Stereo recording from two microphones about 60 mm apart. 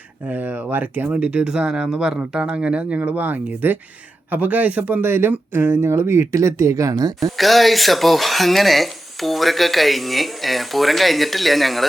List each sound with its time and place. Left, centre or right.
0.3 s speech: right
1.1 s speech: centre
5.0 s speech: right
7.2 s speech: centre